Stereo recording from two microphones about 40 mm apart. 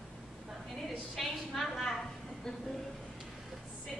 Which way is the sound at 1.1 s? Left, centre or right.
Centre.